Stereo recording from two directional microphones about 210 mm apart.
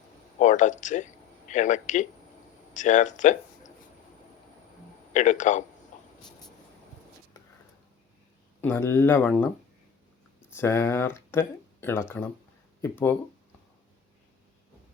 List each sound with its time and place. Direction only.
0.3 s speech: 35° left (ahead or behind)
5.1 s speech: 35° left (ahead or behind)
8.6 s speech: 10° left (ahead or behind)
10.5 s speech: 10° left (ahead or behind)